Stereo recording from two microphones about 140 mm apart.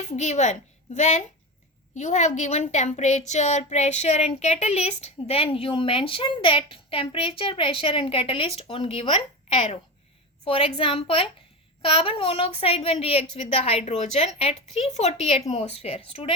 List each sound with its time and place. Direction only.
0.2 s a woman's voice: 55° left (ahead or behind)